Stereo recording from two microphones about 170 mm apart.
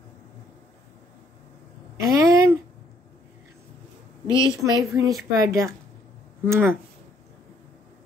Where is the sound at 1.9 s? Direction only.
20° right (ahead or behind).